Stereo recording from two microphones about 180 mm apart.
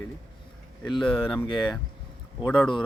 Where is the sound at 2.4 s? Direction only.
5° left (ahead or behind).